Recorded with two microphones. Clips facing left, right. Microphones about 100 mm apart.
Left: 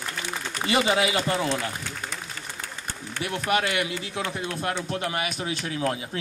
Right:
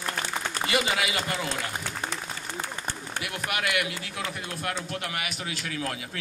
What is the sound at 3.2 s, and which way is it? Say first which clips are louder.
A man's voice: left 6 dB; 30° left (ahead or behind).